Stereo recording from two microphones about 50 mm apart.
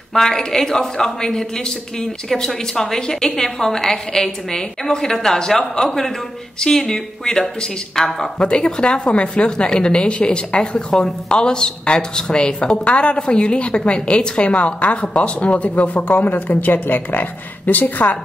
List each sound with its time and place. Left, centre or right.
0.1 s a woman's voice: centre; by 18.1 s left